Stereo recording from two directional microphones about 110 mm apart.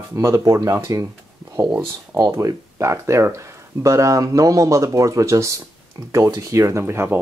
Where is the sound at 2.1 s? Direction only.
30° right (ahead or behind).